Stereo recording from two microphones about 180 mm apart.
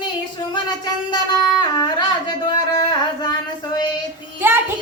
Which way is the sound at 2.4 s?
25° left (ahead or behind).